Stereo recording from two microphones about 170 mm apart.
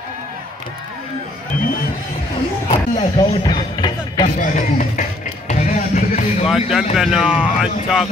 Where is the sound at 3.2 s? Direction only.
25° left (ahead or behind).